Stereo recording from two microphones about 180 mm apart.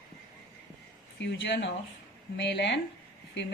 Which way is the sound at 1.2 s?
75° left (ahead or behind).